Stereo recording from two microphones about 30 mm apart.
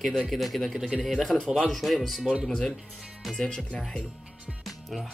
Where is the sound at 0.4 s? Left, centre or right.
Centre.